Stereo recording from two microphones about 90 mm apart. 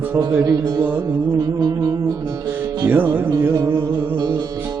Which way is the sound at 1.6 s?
45° right (ahead or behind).